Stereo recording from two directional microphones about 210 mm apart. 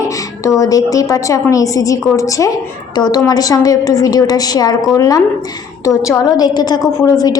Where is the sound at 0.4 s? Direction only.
15° left (ahead or behind).